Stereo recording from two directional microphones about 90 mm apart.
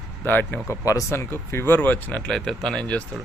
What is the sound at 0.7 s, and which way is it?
Speech, 40° left (ahead or behind).